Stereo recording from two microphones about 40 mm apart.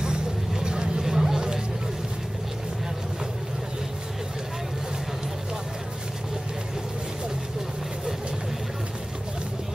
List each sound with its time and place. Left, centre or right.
0.0 s vehicle: centre